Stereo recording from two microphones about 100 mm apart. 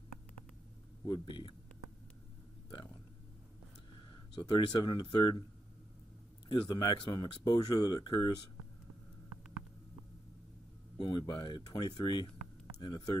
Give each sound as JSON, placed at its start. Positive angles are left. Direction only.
{"t": 1.0, "sound": "speech", "side_deg": 45}
{"t": 4.1, "sound": "a sound", "side_deg": 55}
{"t": 4.8, "sound": "speech", "side_deg": 50}
{"t": 6.5, "sound": "speech", "side_deg": 50}
{"t": 11.0, "sound": "speech", "side_deg": 50}